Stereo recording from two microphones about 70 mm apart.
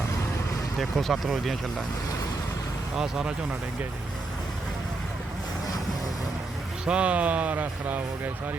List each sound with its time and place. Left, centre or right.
0.8 s speech: centre
2.9 s speech: centre
6.8 s speech: centre